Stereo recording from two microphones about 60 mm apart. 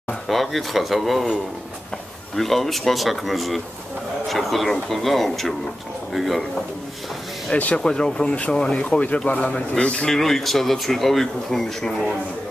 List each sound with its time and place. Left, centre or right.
0.3 s speech: centre
2.3 s speech: centre
7.5 s speech: left
7.8 s speech: centre
10.1 s speech: centre